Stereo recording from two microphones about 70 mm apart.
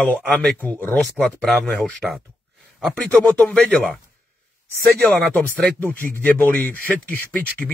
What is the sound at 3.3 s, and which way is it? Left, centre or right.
Speech, centre.